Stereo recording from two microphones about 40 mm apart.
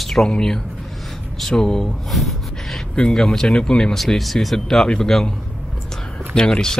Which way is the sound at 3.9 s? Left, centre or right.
Centre.